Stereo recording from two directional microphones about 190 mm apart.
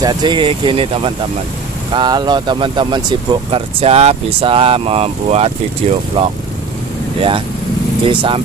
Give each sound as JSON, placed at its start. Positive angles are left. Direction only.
{"t": 0.0, "sound": "speech", "side_deg": -25}